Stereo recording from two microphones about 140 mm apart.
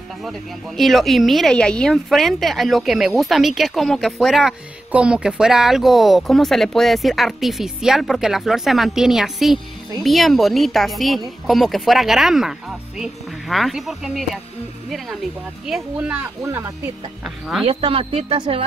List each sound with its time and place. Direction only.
0.2 s speech: centre (ahead or behind)
15.6 s speech: 5° right (ahead or behind)
17.6 s a woman's voice: 45° right (ahead or behind)